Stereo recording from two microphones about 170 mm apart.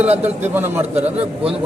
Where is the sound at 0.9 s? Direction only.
40° right (ahead or behind).